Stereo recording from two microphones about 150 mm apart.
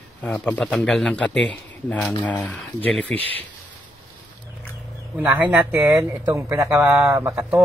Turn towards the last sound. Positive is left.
turn(degrees=-15)  # may be behind; listen again after turning